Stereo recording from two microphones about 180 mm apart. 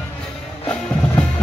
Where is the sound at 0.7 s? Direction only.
5° left (ahead or behind).